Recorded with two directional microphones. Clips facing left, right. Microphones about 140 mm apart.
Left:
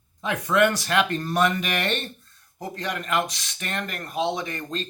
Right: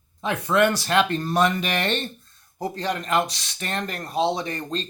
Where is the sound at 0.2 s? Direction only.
30° right (ahead or behind).